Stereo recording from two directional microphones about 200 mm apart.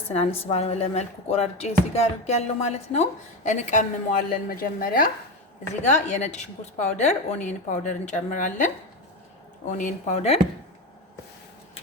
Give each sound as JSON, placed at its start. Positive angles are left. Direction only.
{"t": 0.1, "sound": "a woman's voice", "side_deg": 30}
{"t": 9.7, "sound": "a woman's voice", "side_deg": 35}